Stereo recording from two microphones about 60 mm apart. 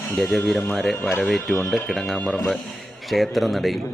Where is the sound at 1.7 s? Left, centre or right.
Centre.